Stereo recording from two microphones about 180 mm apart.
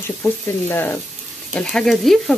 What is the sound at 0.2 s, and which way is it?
Speech, 10° left (ahead or behind).